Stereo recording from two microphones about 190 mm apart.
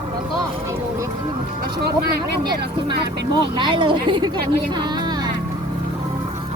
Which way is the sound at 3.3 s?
25° right (ahead or behind).